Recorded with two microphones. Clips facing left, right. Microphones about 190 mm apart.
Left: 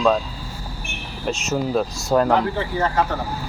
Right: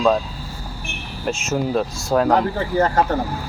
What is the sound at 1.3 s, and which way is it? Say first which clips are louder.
Speech: right 1 dB; centre (ahead or behind).